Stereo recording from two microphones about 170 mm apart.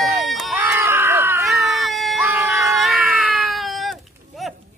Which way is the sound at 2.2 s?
10° right (ahead or behind).